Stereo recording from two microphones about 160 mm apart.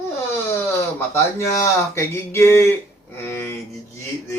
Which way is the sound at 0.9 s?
15° left (ahead or behind).